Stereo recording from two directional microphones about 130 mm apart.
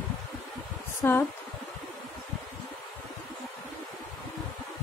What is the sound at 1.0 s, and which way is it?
Speech, 20° left (ahead or behind).